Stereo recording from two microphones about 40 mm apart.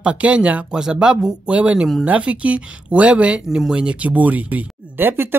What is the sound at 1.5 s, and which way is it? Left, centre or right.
Speech, right.